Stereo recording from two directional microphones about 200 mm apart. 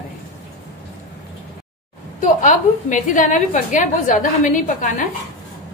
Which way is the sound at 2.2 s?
40° left (ahead or behind).